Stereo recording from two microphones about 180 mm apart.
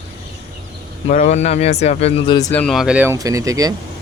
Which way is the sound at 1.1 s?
45° left (ahead or behind).